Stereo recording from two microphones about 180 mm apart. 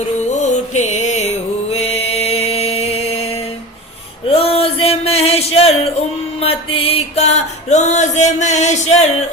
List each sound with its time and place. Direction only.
0.5 s music: 40° left (ahead or behind)
4.3 s a sound: 35° left (ahead or behind)
6.4 s music: 30° left (ahead or behind)